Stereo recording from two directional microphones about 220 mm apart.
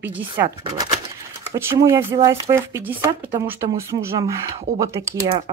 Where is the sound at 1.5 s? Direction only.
10° right (ahead or behind).